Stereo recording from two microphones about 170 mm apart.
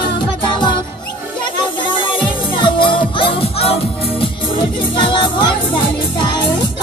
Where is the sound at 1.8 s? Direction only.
30° left (ahead or behind).